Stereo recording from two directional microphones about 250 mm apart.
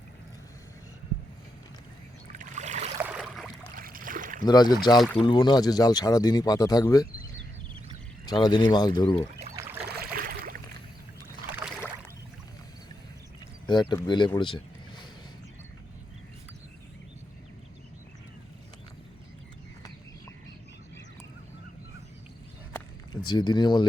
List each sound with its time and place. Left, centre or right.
2.3 s boat: right
3.0 s boat: centre
3.8 s boat: right
4.4 s speech: centre
4.9 s speech: centre
5.2 s speech: centre
8.3 s speech: centre
9.8 s a sound: right
13.9 s speech: centre
23.2 s speech: centre